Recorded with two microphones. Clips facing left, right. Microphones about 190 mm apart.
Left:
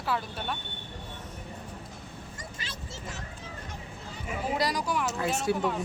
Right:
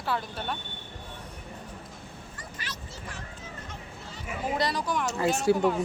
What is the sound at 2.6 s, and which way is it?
Vehicle, 25° left (ahead or behind).